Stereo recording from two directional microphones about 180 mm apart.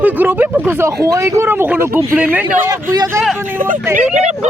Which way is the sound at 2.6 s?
20° right (ahead or behind).